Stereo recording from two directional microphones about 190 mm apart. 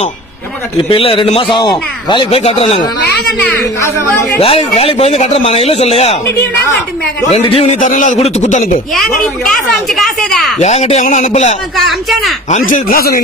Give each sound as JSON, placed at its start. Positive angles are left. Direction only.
{"t": 0.8, "sound": "a man's voice", "side_deg": 30}
{"t": 3.8, "sound": "speech", "side_deg": 15}
{"t": 4.4, "sound": "speech", "side_deg": 30}
{"t": 7.2, "sound": "speech", "side_deg": 30}
{"t": 8.9, "sound": "a woman's voice", "side_deg": 0}
{"t": 10.6, "sound": "speech", "side_deg": 35}
{"t": 11.7, "sound": "a woman's voice", "side_deg": 0}
{"t": 12.4, "sound": "speech", "side_deg": 40}